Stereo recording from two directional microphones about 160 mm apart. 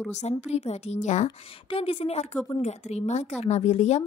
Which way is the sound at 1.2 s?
35° left (ahead or behind).